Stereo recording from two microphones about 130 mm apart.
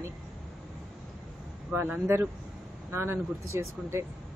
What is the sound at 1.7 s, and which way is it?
A man's voice, 15° right (ahead or behind).